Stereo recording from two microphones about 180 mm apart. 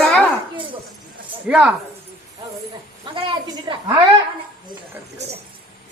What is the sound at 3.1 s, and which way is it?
Speech, 30° right (ahead or behind).